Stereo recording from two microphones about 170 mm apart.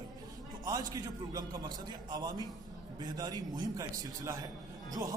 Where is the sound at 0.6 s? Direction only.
20° right (ahead or behind).